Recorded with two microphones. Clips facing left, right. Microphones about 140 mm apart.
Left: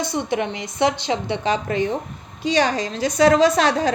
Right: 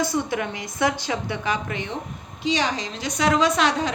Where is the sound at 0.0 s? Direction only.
25° left (ahead or behind).